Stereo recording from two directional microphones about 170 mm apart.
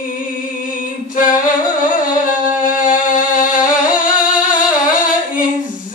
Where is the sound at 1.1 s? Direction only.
50° left (ahead or behind).